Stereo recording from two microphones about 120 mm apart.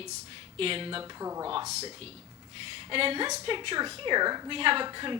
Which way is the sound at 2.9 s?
50° right (ahead or behind).